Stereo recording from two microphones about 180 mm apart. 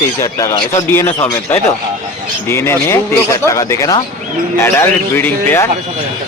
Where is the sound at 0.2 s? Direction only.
20° left (ahead or behind).